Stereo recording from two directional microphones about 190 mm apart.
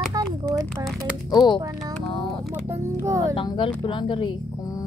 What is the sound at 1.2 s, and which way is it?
Speech, 20° left (ahead or behind).